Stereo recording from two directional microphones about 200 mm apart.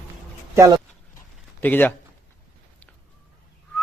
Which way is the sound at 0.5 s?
15° right (ahead or behind).